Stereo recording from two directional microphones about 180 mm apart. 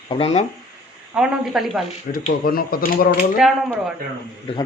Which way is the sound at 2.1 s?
50° left (ahead or behind).